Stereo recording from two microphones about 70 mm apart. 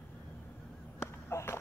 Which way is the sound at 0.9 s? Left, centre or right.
Left.